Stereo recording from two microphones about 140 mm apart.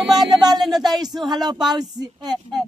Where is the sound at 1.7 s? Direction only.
30° right (ahead or behind).